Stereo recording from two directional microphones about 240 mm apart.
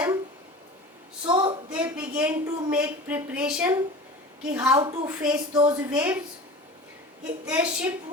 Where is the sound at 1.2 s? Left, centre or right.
Centre.